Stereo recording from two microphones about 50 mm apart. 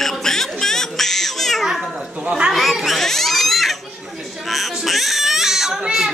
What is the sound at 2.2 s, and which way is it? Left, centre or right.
Speech, centre.